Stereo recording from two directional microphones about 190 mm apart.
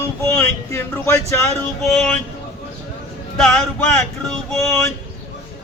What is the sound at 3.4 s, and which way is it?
Speech, centre (ahead or behind).